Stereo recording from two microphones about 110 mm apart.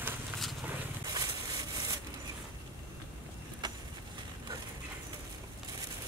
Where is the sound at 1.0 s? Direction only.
35° right (ahead or behind).